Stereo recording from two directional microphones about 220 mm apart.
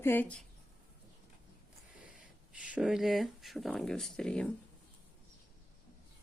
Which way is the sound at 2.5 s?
5° right (ahead or behind).